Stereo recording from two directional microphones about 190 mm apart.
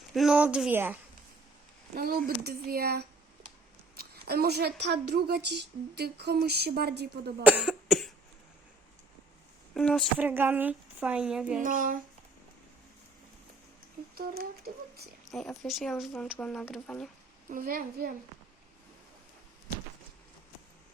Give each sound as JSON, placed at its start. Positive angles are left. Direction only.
{"t": 0.1, "sound": "speech", "side_deg": 0}
{"t": 2.0, "sound": "a woman's voice", "side_deg": -50}
{"t": 7.4, "sound": "cough", "side_deg": -5}
{"t": 9.7, "sound": "speech", "side_deg": 0}
{"t": 10.2, "sound": "speech", "side_deg": -10}
{"t": 11.6, "sound": "speech", "side_deg": -45}
{"t": 14.2, "sound": "speech", "side_deg": -55}
{"t": 15.3, "sound": "speech", "side_deg": 0}
{"t": 17.5, "sound": "speech", "side_deg": -50}